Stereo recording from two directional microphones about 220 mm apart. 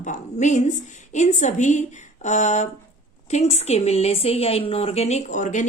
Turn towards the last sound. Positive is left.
turn(degrees=35)  # may be behind; listen again after turning